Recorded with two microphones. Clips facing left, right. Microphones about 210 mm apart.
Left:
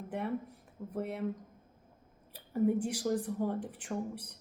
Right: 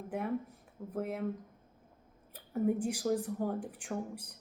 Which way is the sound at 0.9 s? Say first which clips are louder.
Even; centre (ahead or behind).